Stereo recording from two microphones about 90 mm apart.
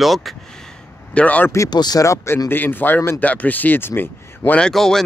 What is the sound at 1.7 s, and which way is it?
Speech, 50° left (ahead or behind).